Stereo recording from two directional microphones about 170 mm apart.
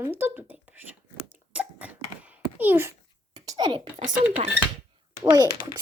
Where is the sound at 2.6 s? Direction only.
10° right (ahead or behind).